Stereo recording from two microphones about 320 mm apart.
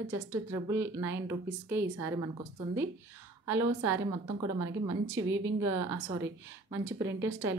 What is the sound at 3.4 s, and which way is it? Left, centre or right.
Speech, centre.